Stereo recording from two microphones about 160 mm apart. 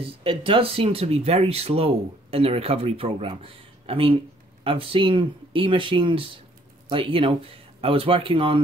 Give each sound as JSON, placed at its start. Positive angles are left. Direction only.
{"t": 0.0, "sound": "speech", "side_deg": -35}